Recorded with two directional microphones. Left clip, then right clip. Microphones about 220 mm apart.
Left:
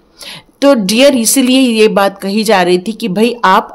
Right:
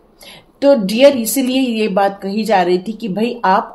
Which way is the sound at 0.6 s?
35° left (ahead or behind).